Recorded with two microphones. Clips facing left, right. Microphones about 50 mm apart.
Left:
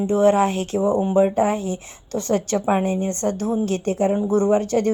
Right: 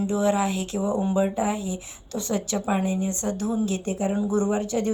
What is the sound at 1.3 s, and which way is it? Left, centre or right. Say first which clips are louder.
Speech: left 6 dB; left.